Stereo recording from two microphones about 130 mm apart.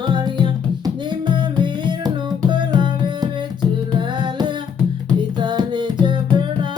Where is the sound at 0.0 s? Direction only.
35° right (ahead or behind).